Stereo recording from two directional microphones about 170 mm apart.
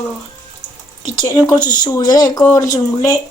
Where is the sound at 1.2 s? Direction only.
20° left (ahead or behind).